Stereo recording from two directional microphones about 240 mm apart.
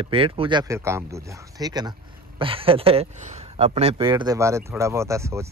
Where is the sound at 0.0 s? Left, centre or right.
Right.